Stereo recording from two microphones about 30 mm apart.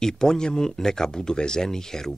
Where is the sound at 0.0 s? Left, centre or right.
Left.